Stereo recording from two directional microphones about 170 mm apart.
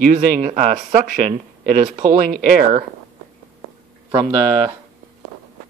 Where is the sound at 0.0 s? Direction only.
45° right (ahead or behind).